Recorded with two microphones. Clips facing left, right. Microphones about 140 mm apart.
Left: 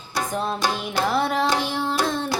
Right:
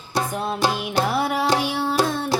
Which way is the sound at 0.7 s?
5° right (ahead or behind).